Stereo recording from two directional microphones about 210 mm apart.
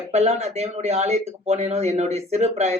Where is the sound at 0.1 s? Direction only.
30° right (ahead or behind).